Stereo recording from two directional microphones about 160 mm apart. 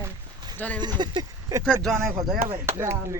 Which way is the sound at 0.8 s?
25° right (ahead or behind).